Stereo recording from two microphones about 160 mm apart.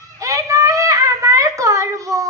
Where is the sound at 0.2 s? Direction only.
20° right (ahead or behind).